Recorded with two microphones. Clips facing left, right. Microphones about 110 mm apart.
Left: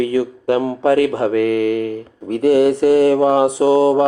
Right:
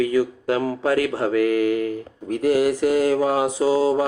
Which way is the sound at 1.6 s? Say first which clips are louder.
Left 3 dB; 30° right (ahead or behind).